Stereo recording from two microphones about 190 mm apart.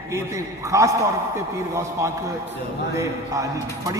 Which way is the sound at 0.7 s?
15° right (ahead or behind).